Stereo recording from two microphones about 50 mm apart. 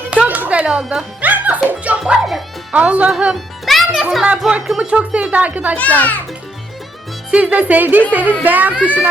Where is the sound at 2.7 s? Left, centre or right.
Right.